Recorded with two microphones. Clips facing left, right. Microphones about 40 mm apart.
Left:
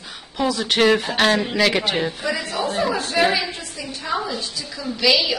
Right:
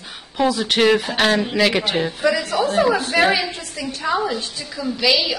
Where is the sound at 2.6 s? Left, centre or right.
Right.